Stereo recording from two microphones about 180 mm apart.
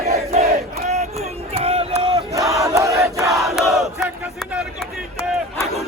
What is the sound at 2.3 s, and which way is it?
Battle cry, 15° right (ahead or behind).